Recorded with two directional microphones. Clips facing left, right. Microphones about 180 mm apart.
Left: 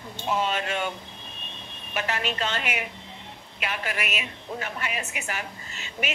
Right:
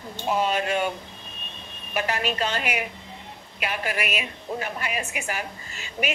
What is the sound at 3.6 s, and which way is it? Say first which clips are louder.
A woman's voice: right 3 dB; 45° right (ahead or behind).